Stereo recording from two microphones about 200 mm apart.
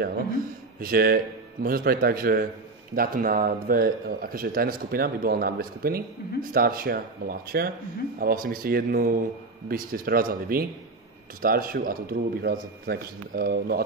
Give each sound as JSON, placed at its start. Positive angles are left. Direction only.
{"t": 0.7, "sound": "speech", "side_deg": -45}